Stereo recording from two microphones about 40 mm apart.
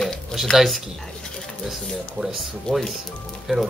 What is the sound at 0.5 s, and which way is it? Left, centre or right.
Speech, centre.